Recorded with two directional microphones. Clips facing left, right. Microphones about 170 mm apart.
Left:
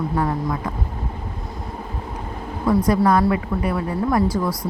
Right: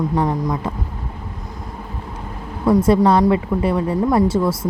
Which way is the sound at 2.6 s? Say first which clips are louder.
Right 4 dB; 25° right (ahead or behind).